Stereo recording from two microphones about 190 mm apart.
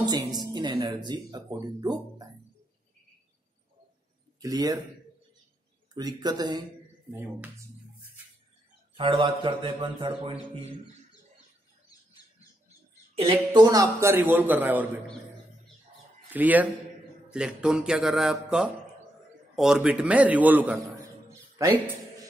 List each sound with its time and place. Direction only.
0.3 s speech: 20° right (ahead or behind)
4.4 s speech: 20° right (ahead or behind)
5.9 s speech: 20° right (ahead or behind)
7.2 s a man's voice: 10° right (ahead or behind)
8.9 s speech: 25° right (ahead or behind)
13.1 s a man's voice: 25° right (ahead or behind); by 14.9 s 10° right (ahead or behind)
16.3 s a man's voice: 10° right (ahead or behind)